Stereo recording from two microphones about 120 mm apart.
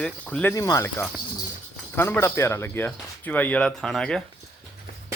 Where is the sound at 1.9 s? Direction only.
20° left (ahead or behind).